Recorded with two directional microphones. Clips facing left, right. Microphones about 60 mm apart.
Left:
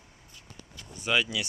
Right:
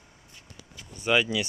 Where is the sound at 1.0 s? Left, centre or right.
Centre.